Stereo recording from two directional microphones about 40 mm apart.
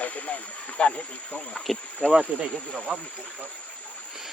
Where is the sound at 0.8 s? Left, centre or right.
Left.